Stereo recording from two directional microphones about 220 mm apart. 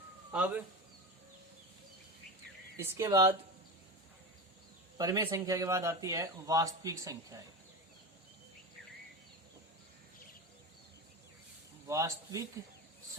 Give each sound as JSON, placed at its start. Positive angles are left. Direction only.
{"t": 0.3, "sound": "a man's voice", "side_deg": -5}
{"t": 2.7, "sound": "speech", "side_deg": -15}
{"t": 4.9, "sound": "speech", "side_deg": -15}
{"t": 11.9, "sound": "speech", "side_deg": -15}